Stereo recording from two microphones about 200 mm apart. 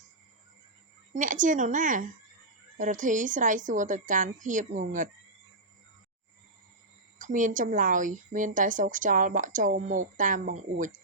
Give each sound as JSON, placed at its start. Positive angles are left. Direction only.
{"t": 1.1, "sound": "a woman's voice", "side_deg": -40}
{"t": 7.2, "sound": "a woman's voice", "side_deg": -40}